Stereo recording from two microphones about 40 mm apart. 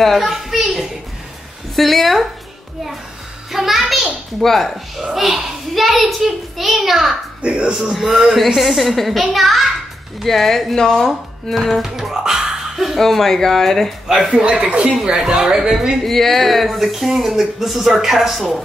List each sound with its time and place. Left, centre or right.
0.0 s speech: centre
3.5 s speech: centre
4.9 s speech: centre
7.4 s speech: right
7.9 s a woman's voice: centre
11.8 s speech: centre
12.9 s speech: centre
14.0 s speech: centre
14.3 s speech: right
15.3 s a woman's voice: centre
16.0 s speech: centre